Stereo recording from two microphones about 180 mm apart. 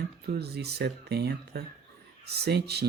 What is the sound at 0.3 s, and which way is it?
Speech, 65° right (ahead or behind).